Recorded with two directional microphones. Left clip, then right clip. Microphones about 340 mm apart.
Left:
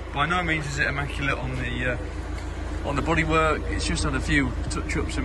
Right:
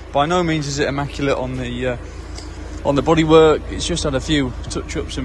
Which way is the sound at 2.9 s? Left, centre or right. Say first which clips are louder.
Right 10 dB; centre.